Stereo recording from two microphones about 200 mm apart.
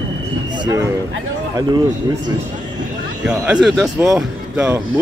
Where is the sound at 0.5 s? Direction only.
20° right (ahead or behind).